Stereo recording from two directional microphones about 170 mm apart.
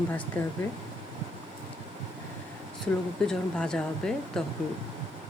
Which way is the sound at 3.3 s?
5° left (ahead or behind).